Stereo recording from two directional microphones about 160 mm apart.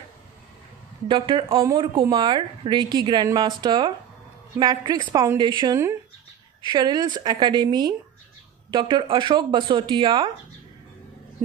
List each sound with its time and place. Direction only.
1.0 s speech: 30° right (ahead or behind)